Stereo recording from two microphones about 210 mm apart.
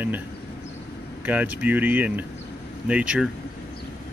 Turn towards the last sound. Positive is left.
turn(degrees=-5)  # may be behind; listen again after turning